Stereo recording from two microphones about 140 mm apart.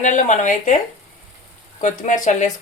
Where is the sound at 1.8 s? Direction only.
60° left (ahead or behind).